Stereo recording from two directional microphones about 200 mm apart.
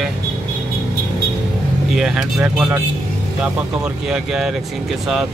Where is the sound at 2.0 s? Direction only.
Centre (ahead or behind).